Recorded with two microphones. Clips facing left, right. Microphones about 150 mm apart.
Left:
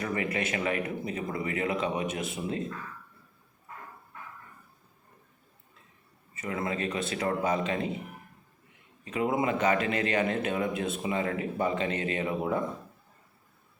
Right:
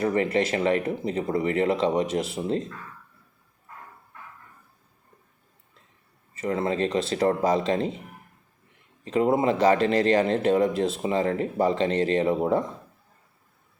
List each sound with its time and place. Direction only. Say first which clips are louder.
0.0 s speech: right 8 dB; 30° right (ahead or behind)
6.3 s speech: right 7 dB; 30° right (ahead or behind)
9.0 s speech: right 6 dB; 35° right (ahead or behind)